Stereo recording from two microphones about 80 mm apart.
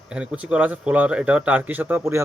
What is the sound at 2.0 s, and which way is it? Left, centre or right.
Speech, right.